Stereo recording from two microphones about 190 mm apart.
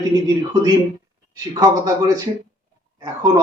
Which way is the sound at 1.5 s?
20° right (ahead or behind).